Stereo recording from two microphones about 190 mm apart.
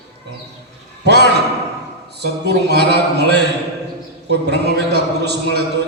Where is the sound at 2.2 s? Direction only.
60° right (ahead or behind).